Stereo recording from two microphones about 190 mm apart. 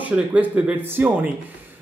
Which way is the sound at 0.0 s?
10° right (ahead or behind).